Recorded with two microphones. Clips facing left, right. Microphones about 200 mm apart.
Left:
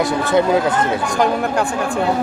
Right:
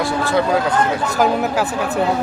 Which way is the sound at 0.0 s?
20° left (ahead or behind).